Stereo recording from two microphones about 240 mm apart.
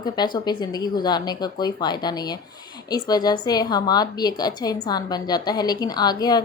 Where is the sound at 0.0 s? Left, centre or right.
Centre.